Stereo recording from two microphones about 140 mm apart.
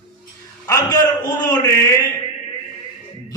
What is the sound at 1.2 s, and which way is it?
Music, 25° left (ahead or behind).